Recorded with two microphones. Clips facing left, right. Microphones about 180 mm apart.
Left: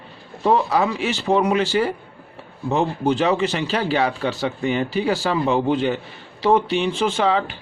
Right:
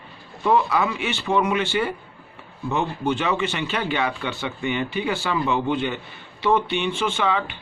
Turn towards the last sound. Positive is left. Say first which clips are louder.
# left 4 dB
turn(degrees=35)  # may be behind; listen again after turning